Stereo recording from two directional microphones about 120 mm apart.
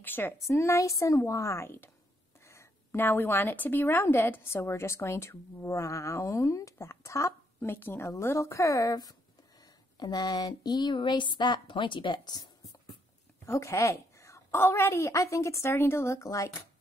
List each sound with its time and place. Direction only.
0.0 s speech: 20° left (ahead or behind); by 12.4 s 40° left (ahead or behind)
13.5 s speech: 25° left (ahead or behind)